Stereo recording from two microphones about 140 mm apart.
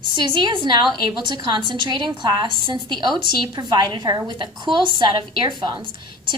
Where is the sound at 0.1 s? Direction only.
35° right (ahead or behind).